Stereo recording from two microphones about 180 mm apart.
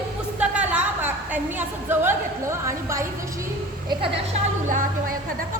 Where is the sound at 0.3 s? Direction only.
10° right (ahead or behind).